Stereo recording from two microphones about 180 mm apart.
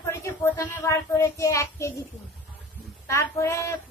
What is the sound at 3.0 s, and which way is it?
Child singing, 15° left (ahead or behind).